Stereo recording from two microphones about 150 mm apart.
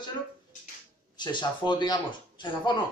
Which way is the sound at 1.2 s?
30° left (ahead or behind).